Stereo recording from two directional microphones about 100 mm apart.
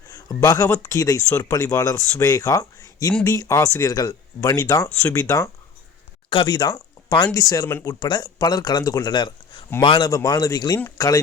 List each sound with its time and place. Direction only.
0.1 s speech: 35° left (ahead or behind)
6.3 s speech: 45° left (ahead or behind)
7.9 s speech: 45° left (ahead or behind)
10.1 s speech: 40° left (ahead or behind)